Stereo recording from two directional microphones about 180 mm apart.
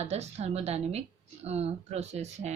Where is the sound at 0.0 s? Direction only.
40° right (ahead or behind).